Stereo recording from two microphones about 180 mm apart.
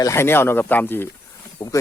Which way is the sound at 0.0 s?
15° left (ahead or behind).